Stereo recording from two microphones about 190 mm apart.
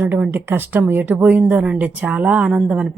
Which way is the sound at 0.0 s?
10° right (ahead or behind).